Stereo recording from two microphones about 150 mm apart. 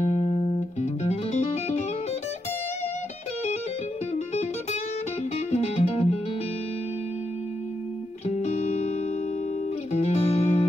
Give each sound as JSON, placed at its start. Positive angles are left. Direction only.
{"t": 0.0, "sound": "music", "side_deg": 45}
{"t": 5.5, "sound": "music", "side_deg": 45}
{"t": 8.3, "sound": "music", "side_deg": 45}
{"t": 9.9, "sound": "music", "side_deg": 45}